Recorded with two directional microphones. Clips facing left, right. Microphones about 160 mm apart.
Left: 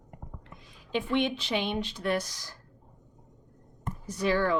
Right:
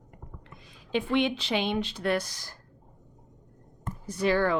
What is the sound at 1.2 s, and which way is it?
Speech, 80° right.